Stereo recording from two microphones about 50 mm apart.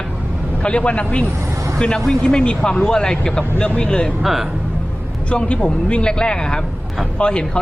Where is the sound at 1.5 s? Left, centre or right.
Right.